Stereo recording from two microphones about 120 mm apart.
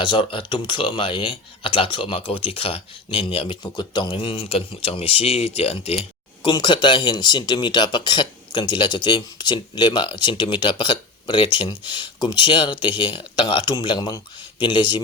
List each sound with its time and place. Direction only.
0.0 s speech: 45° left (ahead or behind)
6.4 s speech: 40° left (ahead or behind)